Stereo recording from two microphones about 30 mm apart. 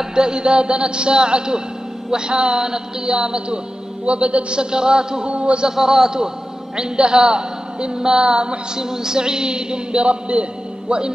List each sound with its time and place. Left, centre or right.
0.0 s a woman's voice: right
5.3 s a man's voice: right
5.7 s a woman's voice: centre
10.0 s a man's voice: right
10.9 s a woman's voice: right